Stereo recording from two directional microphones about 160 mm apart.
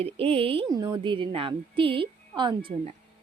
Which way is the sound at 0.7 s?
25° right (ahead or behind).